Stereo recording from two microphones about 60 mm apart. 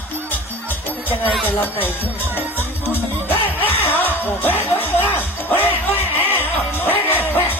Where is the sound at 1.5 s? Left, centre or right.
Left.